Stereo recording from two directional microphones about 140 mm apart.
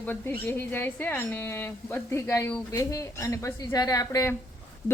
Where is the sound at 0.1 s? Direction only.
15° left (ahead or behind).